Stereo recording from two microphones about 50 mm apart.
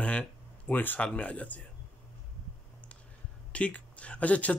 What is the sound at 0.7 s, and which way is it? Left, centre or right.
Speech, left.